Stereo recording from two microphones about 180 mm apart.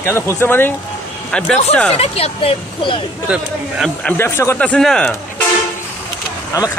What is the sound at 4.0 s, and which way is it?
Speech, 10° left (ahead or behind).